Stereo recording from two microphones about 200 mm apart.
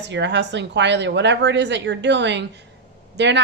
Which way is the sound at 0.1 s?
60° right (ahead or behind).